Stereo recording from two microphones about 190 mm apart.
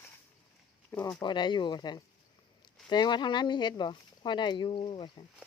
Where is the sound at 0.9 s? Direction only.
10° left (ahead or behind).